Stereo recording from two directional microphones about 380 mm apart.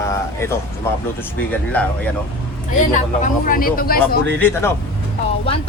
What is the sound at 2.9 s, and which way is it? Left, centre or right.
Speech, left.